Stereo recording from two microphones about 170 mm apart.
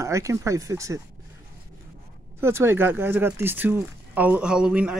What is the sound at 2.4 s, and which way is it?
Speech, 15° right (ahead or behind).